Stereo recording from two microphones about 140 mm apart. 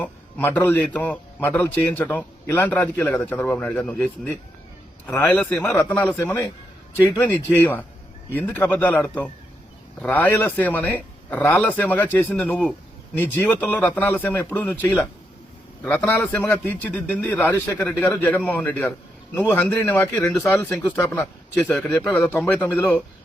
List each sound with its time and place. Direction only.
0.0 s a man's voice: 10° left (ahead or behind)
6.1 s a man's voice: 20° left (ahead or behind)